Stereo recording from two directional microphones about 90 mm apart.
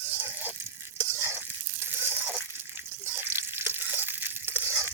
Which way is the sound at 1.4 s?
20° right (ahead or behind).